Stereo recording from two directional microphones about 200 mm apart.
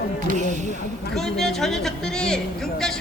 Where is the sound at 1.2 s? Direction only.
Centre (ahead or behind).